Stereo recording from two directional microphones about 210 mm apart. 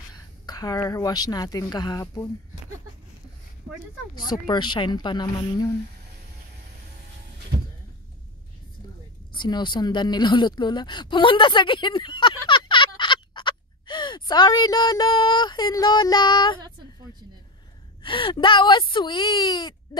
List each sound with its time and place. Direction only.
0.1 s speech: 20° left (ahead or behind)
4.2 s speech: 20° left (ahead or behind)
9.3 s speech: 20° left (ahead or behind)
18.0 s speech: 25° left (ahead or behind)